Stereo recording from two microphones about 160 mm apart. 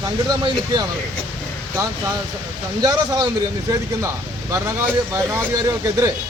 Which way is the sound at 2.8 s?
20° right (ahead or behind).